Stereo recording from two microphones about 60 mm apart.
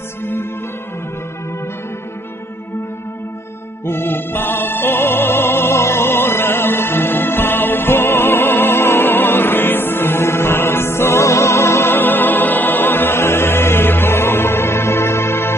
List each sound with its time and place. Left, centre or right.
0.2 s music: left
3.8 s music: left